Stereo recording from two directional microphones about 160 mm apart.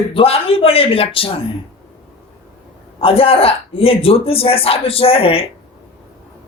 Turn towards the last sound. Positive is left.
turn(degrees=35)  # may be behind; listen again after turning